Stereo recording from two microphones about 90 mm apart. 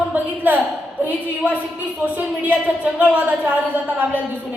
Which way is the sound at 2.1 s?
15° right (ahead or behind).